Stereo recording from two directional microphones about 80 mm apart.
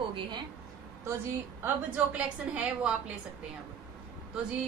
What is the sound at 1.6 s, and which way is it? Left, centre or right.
A woman's voice, centre.